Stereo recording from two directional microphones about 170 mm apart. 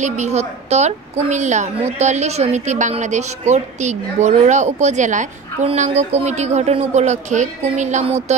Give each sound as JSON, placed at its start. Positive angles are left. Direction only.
{"t": 0.0, "sound": "a woman's voice", "side_deg": -45}